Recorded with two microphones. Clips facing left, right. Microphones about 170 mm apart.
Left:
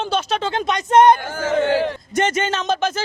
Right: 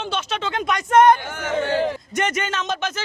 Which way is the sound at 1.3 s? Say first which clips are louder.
Left 4 dB; 30° left (ahead or behind).